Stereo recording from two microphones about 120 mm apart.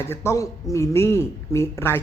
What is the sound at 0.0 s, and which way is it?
A man's voice, 20° left (ahead or behind).